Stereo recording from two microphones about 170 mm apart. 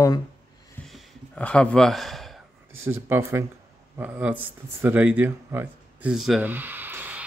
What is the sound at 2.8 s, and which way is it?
Speech, 15° right (ahead or behind).